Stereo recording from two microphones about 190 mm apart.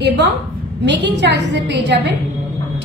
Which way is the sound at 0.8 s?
65° right (ahead or behind).